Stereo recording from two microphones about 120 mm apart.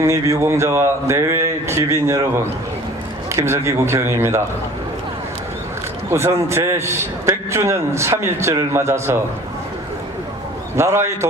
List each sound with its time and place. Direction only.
0.0 s a man's voice: 25° right (ahead or behind)
6.1 s a man's voice: 20° right (ahead or behind)
10.8 s a man's voice: 20° right (ahead or behind)